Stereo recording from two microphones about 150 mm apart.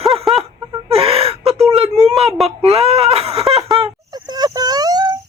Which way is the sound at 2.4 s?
40° right (ahead or behind).